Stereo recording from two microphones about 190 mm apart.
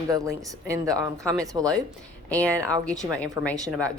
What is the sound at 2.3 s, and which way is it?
Speech, 5° left (ahead or behind).